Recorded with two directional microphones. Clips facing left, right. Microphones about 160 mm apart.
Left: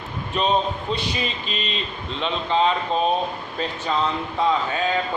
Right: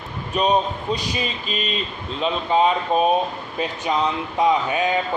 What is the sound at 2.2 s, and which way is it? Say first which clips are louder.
Speech: right 2 dB; 10° right (ahead or behind).